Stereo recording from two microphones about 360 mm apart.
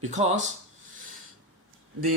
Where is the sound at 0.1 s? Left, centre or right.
Centre.